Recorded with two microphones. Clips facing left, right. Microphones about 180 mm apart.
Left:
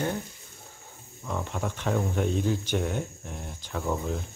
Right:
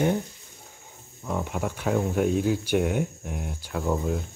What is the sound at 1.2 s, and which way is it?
Speech, 10° right (ahead or behind).